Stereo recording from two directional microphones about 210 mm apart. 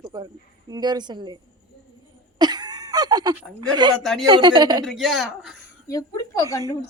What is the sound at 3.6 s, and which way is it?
A woman's voice, 20° right (ahead or behind).